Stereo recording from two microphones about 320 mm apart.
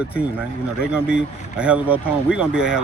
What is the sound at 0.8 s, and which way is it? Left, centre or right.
Speech, centre.